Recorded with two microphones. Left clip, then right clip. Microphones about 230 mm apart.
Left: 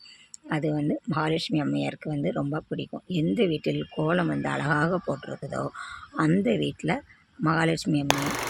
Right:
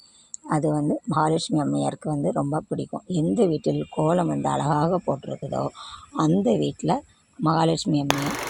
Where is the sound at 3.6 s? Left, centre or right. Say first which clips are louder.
Right 4 dB; centre.